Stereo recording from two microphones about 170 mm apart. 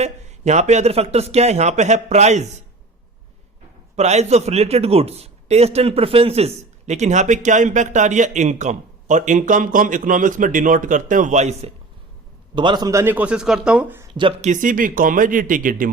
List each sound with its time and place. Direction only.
0.0 s a man's voice: 40° right (ahead or behind)
3.9 s speech: 40° right (ahead or behind)
12.5 s speech: 25° right (ahead or behind)
14.1 s speech: 30° right (ahead or behind)
14.4 s speech: 50° right (ahead or behind)